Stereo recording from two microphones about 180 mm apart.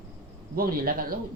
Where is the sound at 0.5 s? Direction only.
55° right (ahead or behind).